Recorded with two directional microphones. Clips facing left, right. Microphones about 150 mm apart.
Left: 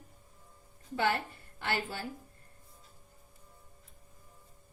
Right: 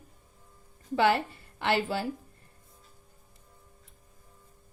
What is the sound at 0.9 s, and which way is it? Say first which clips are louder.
A woman's voice: right 6 dB; 90° right.